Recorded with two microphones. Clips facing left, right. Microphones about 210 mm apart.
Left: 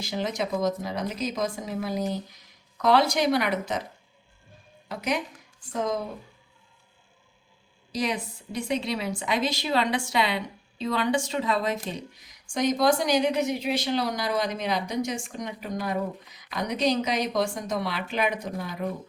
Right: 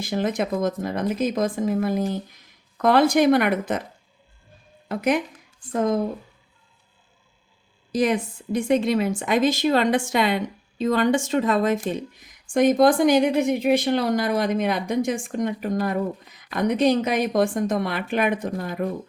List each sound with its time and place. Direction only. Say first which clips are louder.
0.0 s a woman's voice: right 5 dB; 50° right (ahead or behind)
4.9 s a woman's voice: right 7 dB; 55° right (ahead or behind)
7.9 s a woman's voice: right 7 dB; 50° right (ahead or behind)